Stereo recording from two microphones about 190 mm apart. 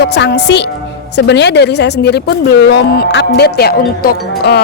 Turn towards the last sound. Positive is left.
turn(degrees=55)  # may be behind; listen again after turning